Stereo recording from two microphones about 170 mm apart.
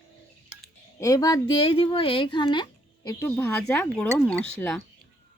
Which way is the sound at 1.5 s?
35° left (ahead or behind).